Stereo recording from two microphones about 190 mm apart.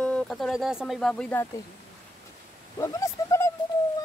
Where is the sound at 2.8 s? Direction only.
15° left (ahead or behind).